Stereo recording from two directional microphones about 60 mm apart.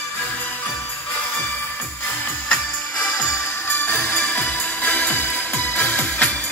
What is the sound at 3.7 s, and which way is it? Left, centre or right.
Music, left.